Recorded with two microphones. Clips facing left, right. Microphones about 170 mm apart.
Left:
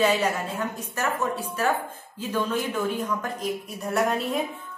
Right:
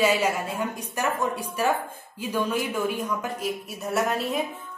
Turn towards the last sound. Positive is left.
turn(degrees=0)  # may be behind; listen again after turning